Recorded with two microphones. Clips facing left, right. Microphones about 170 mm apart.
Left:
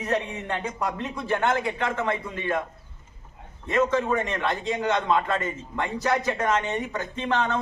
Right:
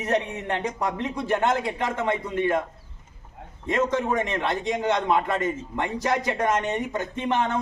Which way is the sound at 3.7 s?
15° right (ahead or behind).